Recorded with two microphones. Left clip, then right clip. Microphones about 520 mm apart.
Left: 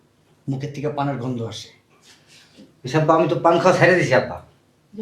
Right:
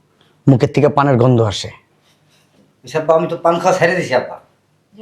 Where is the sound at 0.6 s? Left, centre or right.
Right.